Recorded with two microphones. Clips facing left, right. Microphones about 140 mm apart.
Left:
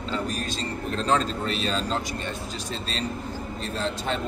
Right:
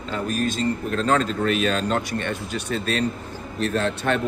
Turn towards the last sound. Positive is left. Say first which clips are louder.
# right 5 dB
turn(degrees=-65)  # may be behind; listen again after turning